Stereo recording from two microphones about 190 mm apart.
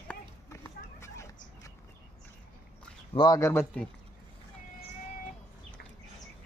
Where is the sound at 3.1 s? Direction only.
20° left (ahead or behind).